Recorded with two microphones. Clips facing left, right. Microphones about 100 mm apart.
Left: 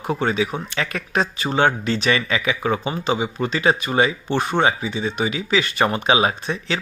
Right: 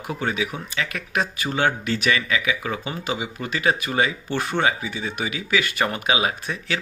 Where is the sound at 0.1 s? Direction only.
35° left (ahead or behind).